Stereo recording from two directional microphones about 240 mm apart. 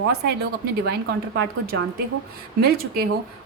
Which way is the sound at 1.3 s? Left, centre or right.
Right.